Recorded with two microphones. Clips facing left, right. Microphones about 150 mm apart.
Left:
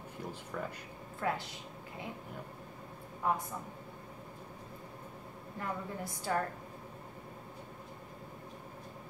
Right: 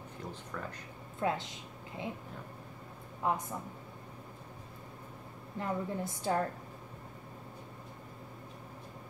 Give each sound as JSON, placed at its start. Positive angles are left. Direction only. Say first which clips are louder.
{"t": 0.2, "sound": "speech", "louder": "left 2 dB", "side_deg": 10}
{"t": 1.2, "sound": "a woman's voice", "louder": "right 2 dB", "side_deg": -25}
{"t": 3.2, "sound": "a woman's voice", "louder": "even", "side_deg": -20}
{"t": 5.6, "sound": "a woman's voice", "louder": "right 4 dB", "side_deg": -25}